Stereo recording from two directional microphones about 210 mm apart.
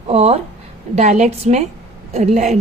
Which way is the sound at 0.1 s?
30° right (ahead or behind).